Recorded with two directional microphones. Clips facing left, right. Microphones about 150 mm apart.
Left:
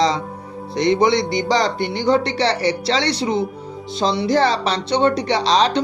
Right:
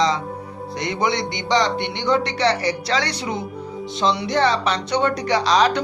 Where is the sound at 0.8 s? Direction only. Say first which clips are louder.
Left 7 dB; 30° left (ahead or behind).